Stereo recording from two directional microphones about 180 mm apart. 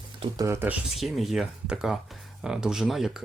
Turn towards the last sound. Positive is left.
turn(degrees=0)  # may be behind; listen again after turning